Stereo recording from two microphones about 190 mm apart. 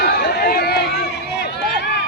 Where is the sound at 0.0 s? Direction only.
60° left (ahead or behind).